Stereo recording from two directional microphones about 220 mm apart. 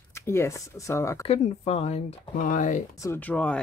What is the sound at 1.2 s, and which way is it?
Speech, 30° left (ahead or behind).